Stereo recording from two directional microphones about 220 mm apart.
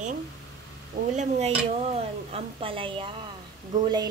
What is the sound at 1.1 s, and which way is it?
A woman's voice, 35° right (ahead or behind).